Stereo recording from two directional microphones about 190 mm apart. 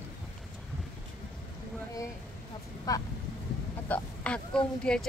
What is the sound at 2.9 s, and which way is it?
Speech, 20° left (ahead or behind).